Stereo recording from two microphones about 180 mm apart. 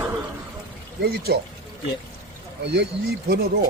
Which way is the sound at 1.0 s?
60° right (ahead or behind).